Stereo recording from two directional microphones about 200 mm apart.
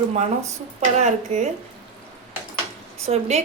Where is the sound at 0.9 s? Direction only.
35° right (ahead or behind).